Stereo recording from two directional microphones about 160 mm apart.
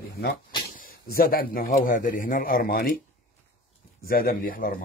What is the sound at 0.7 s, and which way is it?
A man's voice, 65° left (ahead or behind).